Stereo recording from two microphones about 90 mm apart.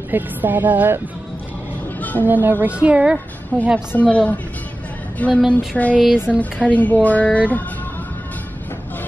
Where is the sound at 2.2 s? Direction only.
20° right (ahead or behind).